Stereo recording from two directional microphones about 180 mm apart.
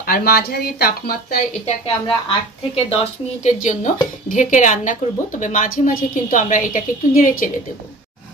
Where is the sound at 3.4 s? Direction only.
45° left (ahead or behind).